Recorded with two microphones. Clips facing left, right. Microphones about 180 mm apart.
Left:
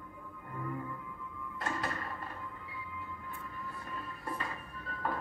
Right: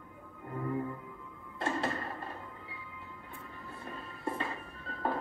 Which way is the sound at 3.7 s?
25° right (ahead or behind).